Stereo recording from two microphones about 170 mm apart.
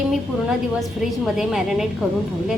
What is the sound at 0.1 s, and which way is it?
A woman's voice, centre (ahead or behind).